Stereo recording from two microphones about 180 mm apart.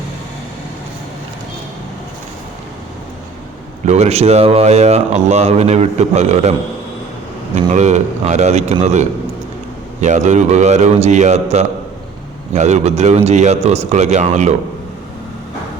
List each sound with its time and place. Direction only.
3.8 s speech: 35° right (ahead or behind)
7.5 s speech: 40° right (ahead or behind)